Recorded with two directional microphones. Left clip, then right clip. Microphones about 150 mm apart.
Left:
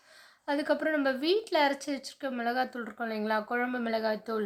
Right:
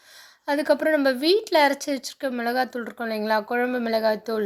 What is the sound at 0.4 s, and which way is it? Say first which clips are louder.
Speech: right 8 dB; 40° right (ahead or behind).